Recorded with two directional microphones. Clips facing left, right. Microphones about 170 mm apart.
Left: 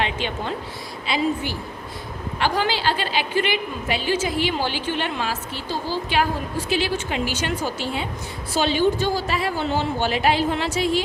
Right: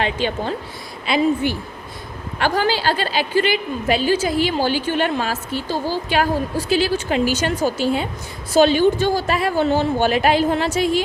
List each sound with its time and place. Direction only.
0.0 s a woman's voice: 40° right (ahead or behind)
1.0 s a woman's voice: 55° right (ahead or behind)
2.4 s a woman's voice: 45° right (ahead or behind)